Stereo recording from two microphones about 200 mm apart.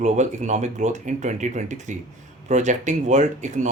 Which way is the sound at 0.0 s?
35° right (ahead or behind).